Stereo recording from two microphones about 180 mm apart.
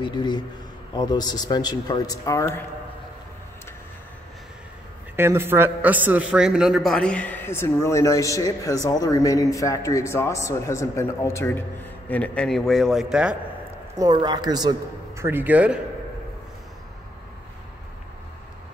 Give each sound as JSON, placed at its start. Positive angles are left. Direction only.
{"t": 0.0, "sound": "a man's voice", "side_deg": 25}
{"t": 5.1, "sound": "a man's voice", "side_deg": -15}
{"t": 13.9, "sound": "a man's voice", "side_deg": -20}